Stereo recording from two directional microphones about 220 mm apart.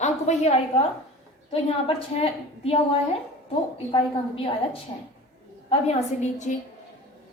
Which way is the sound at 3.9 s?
25° left (ahead or behind).